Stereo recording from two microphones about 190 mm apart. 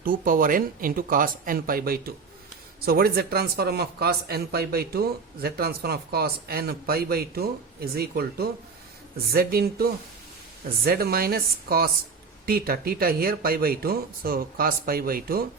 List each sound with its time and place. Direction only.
0.0 s speech: 45° right (ahead or behind)